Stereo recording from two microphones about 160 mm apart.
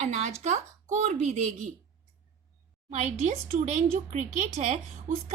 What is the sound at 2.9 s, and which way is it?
Speech, 45° right (ahead or behind).